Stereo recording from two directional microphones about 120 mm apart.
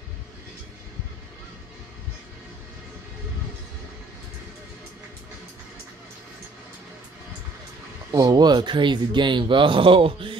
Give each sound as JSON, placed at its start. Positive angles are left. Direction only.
{"t": 8.1, "sound": "speech", "side_deg": -35}